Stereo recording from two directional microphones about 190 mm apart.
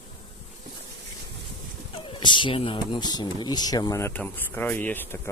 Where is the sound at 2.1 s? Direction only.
25° left (ahead or behind).